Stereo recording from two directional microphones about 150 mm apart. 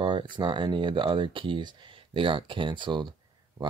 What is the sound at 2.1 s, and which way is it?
Speech, 35° right (ahead or behind).